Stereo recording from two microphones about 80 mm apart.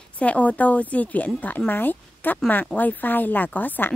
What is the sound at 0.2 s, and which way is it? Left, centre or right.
A woman's voice, centre.